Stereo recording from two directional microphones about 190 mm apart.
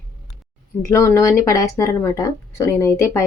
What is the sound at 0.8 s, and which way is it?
Speech, 15° left (ahead or behind).